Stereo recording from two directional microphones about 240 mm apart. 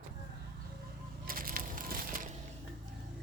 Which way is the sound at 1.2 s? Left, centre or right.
Right.